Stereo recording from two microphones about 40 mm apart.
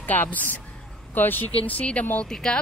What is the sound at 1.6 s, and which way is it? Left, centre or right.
Speech, left.